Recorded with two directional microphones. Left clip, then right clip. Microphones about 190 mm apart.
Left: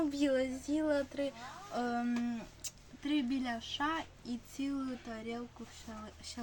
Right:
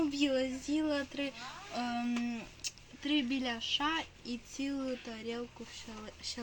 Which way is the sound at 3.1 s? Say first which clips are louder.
Right 2 dB; 10° left (ahead or behind).